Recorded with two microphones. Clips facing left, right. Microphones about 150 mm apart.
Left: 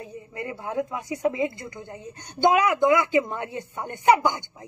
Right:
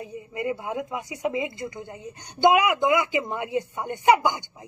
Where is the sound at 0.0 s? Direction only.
20° right (ahead or behind).